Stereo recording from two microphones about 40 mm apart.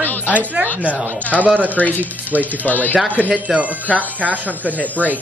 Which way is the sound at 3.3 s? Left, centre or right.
Right.